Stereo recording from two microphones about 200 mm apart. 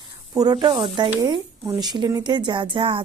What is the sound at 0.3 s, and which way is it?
A woman's voice, 20° right (ahead or behind).